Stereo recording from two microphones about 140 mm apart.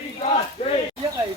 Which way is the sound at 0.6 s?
50° left (ahead or behind).